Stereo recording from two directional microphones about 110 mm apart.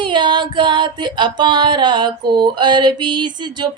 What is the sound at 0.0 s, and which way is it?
Music, 45° right (ahead or behind).